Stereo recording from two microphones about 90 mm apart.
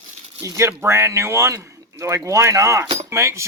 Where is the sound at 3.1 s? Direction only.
30° right (ahead or behind).